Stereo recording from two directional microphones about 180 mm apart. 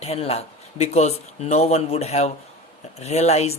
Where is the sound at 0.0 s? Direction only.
35° left (ahead or behind).